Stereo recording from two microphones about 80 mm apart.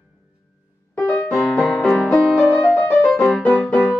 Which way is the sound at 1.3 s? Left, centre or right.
Centre.